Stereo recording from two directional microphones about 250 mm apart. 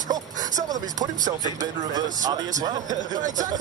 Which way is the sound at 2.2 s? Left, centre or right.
Centre.